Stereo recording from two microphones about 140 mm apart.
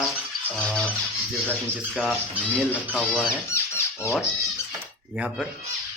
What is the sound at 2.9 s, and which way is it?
Speech, 15° left (ahead or behind).